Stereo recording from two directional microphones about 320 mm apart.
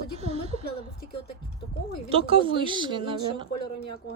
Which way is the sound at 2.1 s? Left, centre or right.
Centre.